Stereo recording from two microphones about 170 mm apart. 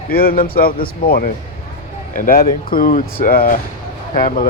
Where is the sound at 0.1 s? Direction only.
60° left (ahead or behind).